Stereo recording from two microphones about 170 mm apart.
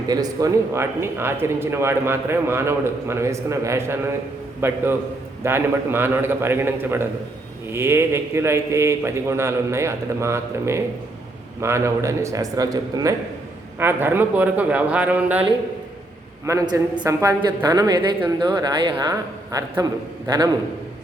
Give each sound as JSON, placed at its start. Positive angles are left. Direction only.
{"t": 0.1, "sound": "a woman's voice", "side_deg": -20}
{"t": 16.5, "sound": "a woman's voice", "side_deg": -20}